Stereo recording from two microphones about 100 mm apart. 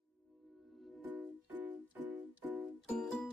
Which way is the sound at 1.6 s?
20° right (ahead or behind).